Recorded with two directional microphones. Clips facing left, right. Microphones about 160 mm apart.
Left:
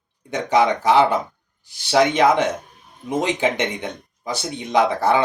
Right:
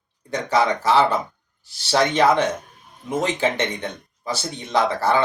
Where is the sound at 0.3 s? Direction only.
20° left (ahead or behind).